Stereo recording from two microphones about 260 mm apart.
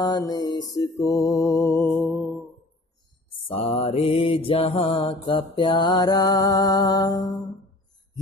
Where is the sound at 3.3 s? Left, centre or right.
Left.